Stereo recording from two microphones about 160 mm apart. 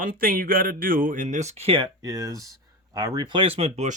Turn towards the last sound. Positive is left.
turn(degrees=-45)  # may be behind; listen again after turning